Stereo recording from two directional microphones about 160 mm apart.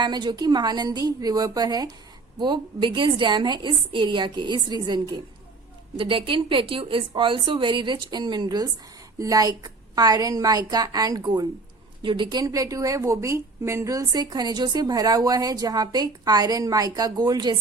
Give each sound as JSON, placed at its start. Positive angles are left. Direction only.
{"t": 0.0, "sound": "a woman's voice", "side_deg": -30}